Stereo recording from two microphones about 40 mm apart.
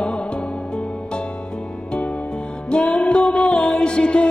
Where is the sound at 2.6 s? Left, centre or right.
Left.